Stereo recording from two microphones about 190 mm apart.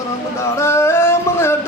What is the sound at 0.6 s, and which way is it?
Music, 15° left (ahead or behind).